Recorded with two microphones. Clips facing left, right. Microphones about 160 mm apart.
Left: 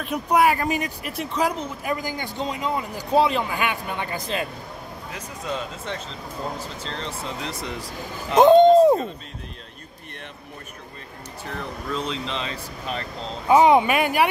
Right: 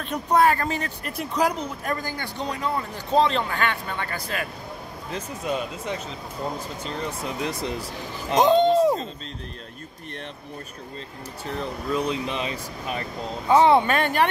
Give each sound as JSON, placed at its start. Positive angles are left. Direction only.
{"t": 0.0, "sound": "a man's voice", "side_deg": 10}
{"t": 1.1, "sound": "speech", "side_deg": 0}
{"t": 1.9, "sound": "a man's voice", "side_deg": 10}
{"t": 5.1, "sound": "speech", "side_deg": -20}
{"t": 6.8, "sound": "speech", "side_deg": -10}
{"t": 8.4, "sound": "a sound", "side_deg": 50}
{"t": 11.4, "sound": "speech", "side_deg": -20}
{"t": 13.5, "sound": "a man's voice", "side_deg": 15}